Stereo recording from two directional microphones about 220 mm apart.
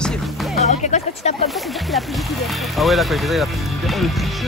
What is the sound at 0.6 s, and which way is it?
Speech, 30° left (ahead or behind).